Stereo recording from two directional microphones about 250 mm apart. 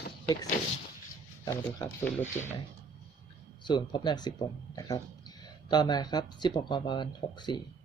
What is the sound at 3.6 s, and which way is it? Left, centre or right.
Speech, centre.